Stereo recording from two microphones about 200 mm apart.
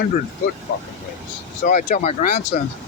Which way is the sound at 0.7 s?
55° left (ahead or behind).